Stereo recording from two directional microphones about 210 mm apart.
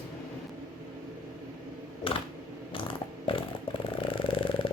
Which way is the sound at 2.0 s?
25° left (ahead or behind).